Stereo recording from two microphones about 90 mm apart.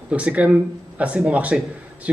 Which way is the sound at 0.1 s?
15° right (ahead or behind).